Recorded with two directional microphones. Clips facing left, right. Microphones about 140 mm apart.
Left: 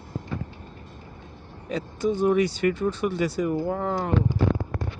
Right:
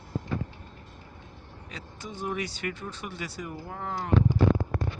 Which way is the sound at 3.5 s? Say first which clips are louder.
Left 10 dB; 90° left.